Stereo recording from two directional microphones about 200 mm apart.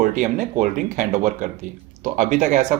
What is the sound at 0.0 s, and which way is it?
Speech, 40° right (ahead or behind).